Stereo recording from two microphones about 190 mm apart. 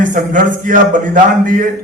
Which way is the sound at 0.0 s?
45° right (ahead or behind).